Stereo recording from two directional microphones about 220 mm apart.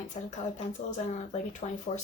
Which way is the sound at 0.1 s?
30° left (ahead or behind).